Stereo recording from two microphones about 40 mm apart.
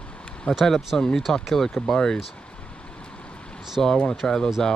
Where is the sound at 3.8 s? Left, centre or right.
Centre.